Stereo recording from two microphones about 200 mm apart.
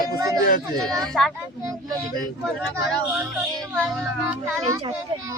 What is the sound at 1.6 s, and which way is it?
Speech, 20° right (ahead or behind).